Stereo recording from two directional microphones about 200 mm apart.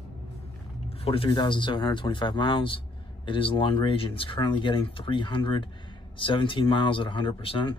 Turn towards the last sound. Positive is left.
turn(degrees=25)  # may be behind; listen again after turning